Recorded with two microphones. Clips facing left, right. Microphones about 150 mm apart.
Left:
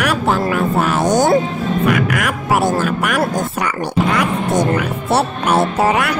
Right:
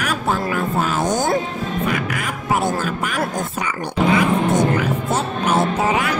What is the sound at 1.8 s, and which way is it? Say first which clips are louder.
Music: left 8 dB; 75° left (ahead or behind).